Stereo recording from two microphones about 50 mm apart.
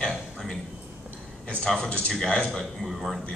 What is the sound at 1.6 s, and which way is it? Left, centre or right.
Speech, centre.